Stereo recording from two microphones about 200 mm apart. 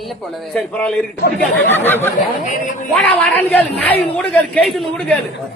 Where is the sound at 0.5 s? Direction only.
5° left (ahead or behind).